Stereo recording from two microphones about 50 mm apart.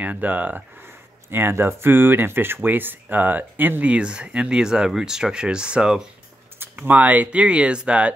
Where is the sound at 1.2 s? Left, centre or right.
Right.